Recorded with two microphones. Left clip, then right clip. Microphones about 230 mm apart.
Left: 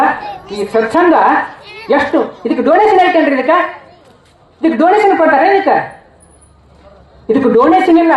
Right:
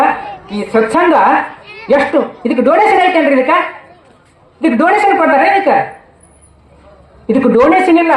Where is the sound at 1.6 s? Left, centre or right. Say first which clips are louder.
Even; left.